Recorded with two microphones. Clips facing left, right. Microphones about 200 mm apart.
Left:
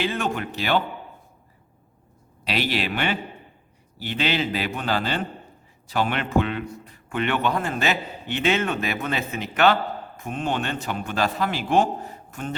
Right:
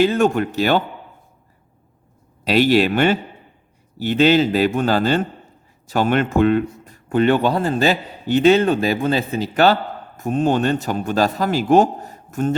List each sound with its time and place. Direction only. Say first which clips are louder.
0.0 s a man's voice: right 10 dB; 45° right (ahead or behind)
2.4 s a man's voice: right 11 dB; 45° right (ahead or behind)